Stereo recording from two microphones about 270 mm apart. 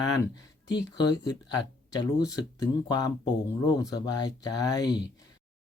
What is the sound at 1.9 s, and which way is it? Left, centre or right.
Speech, centre.